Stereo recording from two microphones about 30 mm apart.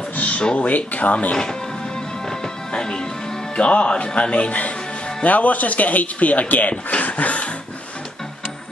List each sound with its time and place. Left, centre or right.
0.6 s speech: left
2.7 s music: left
3.5 s speech: left
6.9 s a sound: left